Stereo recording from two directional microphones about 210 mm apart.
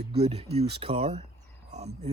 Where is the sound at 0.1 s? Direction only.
30° right (ahead or behind).